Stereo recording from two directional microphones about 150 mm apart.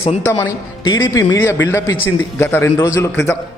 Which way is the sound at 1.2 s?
15° left (ahead or behind).